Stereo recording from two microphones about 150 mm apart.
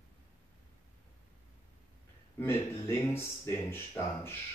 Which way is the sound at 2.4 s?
15° left (ahead or behind).